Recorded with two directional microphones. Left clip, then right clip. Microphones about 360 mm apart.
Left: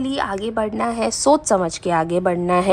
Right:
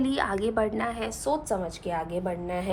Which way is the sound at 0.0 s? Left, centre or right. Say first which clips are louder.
Left 4 dB; centre.